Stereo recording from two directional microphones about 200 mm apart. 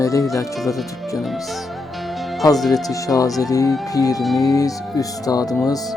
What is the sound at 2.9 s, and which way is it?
Speech, 15° left (ahead or behind).